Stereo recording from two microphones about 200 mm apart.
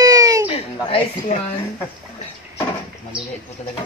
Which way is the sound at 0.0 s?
15° right (ahead or behind).